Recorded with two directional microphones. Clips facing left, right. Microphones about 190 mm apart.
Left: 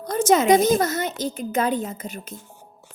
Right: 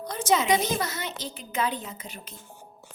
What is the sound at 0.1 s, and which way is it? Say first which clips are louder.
A woman's voice: left 7 dB; 45° left (ahead or behind).